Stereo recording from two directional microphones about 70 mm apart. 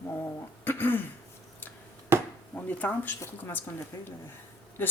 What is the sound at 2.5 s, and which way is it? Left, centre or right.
Speech, left.